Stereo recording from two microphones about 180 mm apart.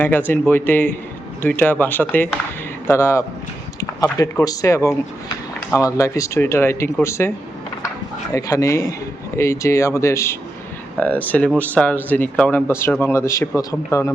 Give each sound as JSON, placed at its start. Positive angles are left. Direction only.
{"t": 0.0, "sound": "speech", "side_deg": 10}
{"t": 3.8, "sound": "a sound", "side_deg": 20}
{"t": 4.4, "sound": "speech", "side_deg": 15}